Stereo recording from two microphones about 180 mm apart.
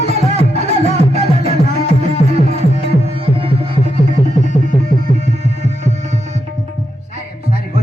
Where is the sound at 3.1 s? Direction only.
30° right (ahead or behind).